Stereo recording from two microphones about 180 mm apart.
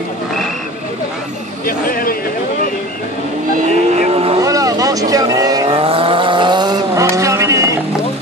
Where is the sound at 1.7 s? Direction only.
55° left (ahead or behind).